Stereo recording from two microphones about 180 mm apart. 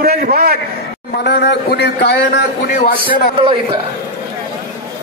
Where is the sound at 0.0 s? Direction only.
60° right (ahead or behind).